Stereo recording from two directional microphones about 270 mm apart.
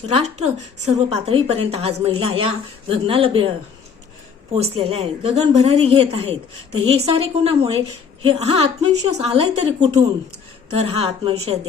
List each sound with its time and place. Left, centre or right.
0.1 s a woman's voice: right
4.6 s a woman's voice: right